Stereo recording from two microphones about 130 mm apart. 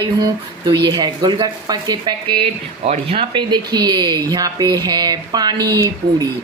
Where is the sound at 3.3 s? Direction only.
35° right (ahead or behind).